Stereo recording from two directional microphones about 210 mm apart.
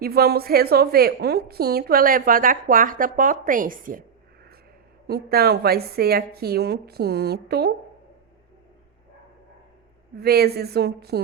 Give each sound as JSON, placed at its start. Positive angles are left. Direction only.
{"t": 0.0, "sound": "a woman's voice", "side_deg": -45}
{"t": 5.0, "sound": "a woman's voice", "side_deg": -50}
{"t": 10.2, "sound": "a woman's voice", "side_deg": -50}